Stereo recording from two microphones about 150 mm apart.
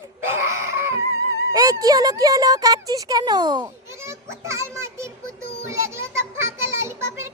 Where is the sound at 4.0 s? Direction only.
20° right (ahead or behind).